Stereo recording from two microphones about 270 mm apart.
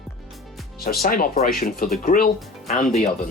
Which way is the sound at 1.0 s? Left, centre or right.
Left.